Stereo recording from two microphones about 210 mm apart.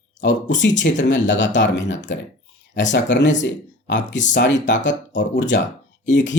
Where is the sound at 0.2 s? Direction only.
60° left (ahead or behind).